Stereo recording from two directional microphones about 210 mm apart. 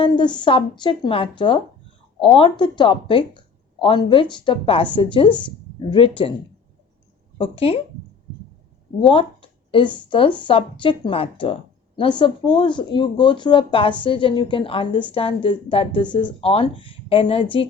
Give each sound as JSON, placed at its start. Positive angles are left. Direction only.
{"t": 0.0, "sound": "speech", "side_deg": 20}
{"t": 7.3, "sound": "speech", "side_deg": 25}
{"t": 9.0, "sound": "speech", "side_deg": 25}